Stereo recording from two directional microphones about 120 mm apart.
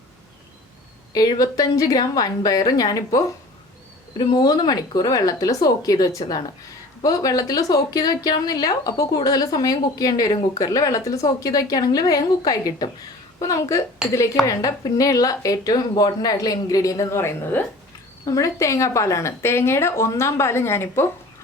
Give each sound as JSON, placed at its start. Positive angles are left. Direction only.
{"t": 1.1, "sound": "a woman's voice", "side_deg": 30}